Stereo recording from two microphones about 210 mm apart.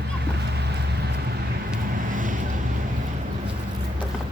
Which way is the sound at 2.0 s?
40° right (ahead or behind).